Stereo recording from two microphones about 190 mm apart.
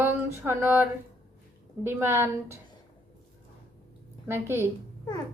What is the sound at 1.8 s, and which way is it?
Speech, 10° right (ahead or behind).